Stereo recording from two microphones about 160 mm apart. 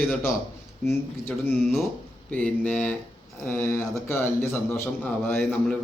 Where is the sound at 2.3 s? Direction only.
10° left (ahead or behind).